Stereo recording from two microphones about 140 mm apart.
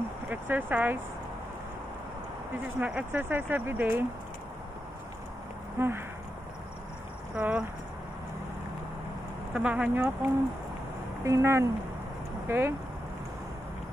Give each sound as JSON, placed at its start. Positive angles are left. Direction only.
{"t": 0.3, "sound": "speech", "side_deg": -15}
{"t": 2.8, "sound": "speech", "side_deg": -10}
{"t": 5.8, "sound": "speech", "side_deg": -15}
{"t": 7.3, "sound": "speech", "side_deg": -10}
{"t": 9.5, "sound": "speech", "side_deg": -10}
{"t": 11.2, "sound": "speech", "side_deg": -20}